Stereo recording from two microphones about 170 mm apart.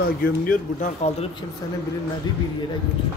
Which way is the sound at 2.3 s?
25° left (ahead or behind).